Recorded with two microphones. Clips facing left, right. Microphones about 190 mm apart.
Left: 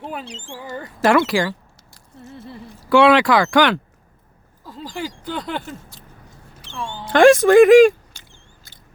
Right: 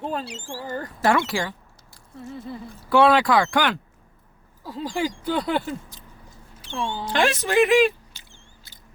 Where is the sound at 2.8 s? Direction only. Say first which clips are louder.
Left 4 dB; 90° left.